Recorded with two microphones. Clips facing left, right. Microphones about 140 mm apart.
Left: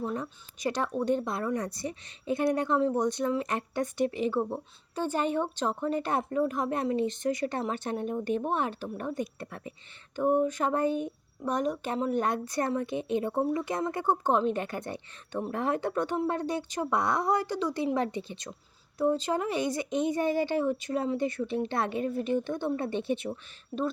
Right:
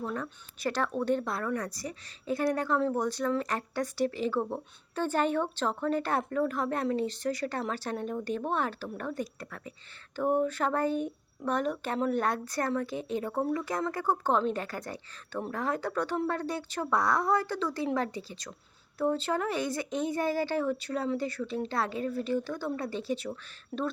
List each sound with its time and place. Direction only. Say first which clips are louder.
0.0 s speech: left 2 dB; 20° left (ahead or behind)